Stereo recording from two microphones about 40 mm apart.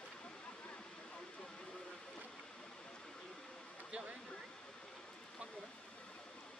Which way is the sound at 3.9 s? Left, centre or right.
Right.